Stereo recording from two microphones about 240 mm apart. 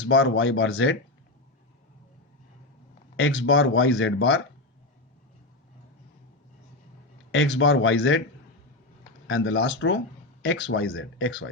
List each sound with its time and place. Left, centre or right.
0.1 s speech: left
3.2 s speech: left
7.3 s speech: left
9.2 s speech: left